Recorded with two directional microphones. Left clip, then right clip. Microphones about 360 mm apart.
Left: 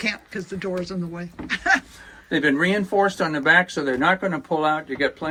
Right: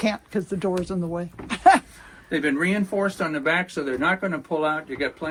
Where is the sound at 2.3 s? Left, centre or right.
Left.